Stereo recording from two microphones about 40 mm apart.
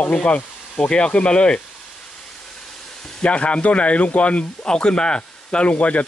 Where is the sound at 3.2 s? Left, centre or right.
Left.